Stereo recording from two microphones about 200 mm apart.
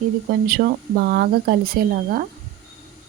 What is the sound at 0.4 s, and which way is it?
Speech, 50° right (ahead or behind).